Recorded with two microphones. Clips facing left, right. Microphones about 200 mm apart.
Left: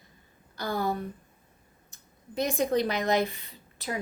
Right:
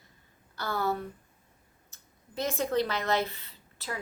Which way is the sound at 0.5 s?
15° left (ahead or behind).